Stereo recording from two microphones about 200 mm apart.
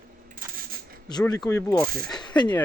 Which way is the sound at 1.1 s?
20° left (ahead or behind).